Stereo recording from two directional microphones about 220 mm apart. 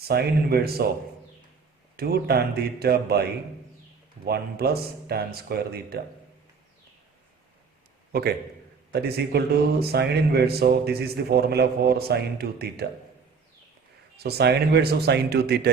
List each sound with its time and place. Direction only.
0.1 s a man's voice: 45° right (ahead or behind)
2.0 s a man's voice: 45° right (ahead or behind)
4.3 s a man's voice: 45° right (ahead or behind)
8.9 s a man's voice: 45° right (ahead or behind)
14.2 s a man's voice: 45° right (ahead or behind)